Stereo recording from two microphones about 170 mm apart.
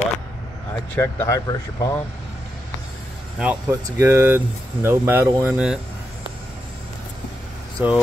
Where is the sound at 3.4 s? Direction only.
10° right (ahead or behind).